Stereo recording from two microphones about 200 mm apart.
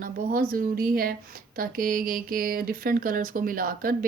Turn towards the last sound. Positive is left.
turn(degrees=-45)  # may be behind; listen again after turning